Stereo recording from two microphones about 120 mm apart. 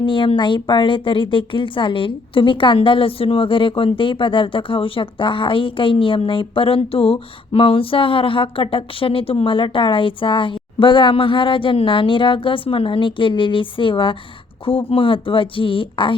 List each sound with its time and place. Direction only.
0.0 s a woman's voice: 45° left (ahead or behind)